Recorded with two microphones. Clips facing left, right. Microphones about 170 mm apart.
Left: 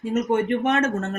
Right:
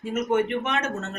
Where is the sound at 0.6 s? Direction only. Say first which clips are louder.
Left 6 dB; 45° left (ahead or behind).